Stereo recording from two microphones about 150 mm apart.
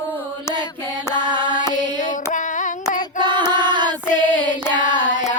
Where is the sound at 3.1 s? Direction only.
30° right (ahead or behind).